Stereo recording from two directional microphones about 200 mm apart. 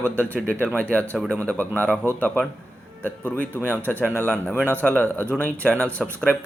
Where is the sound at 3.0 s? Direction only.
10° left (ahead or behind).